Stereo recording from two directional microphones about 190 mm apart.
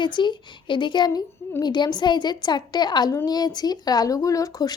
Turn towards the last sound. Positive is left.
turn(degrees=20)  # may be behind; listen again after turning